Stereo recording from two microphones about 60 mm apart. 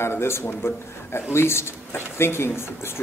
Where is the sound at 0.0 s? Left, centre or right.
Left.